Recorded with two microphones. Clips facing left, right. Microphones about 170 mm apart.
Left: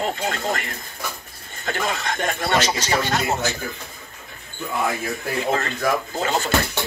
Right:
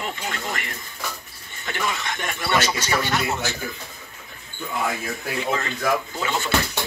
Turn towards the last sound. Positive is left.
turn(degrees=40)  # may be behind; listen again after turning